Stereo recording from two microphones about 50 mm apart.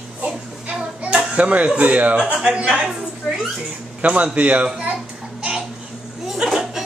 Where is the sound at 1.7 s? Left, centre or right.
Right.